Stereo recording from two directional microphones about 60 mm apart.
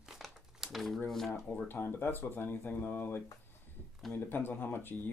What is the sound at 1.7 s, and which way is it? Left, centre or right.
Speech, left.